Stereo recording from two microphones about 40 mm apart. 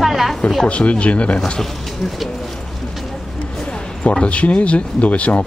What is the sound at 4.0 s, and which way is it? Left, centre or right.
Speech, left.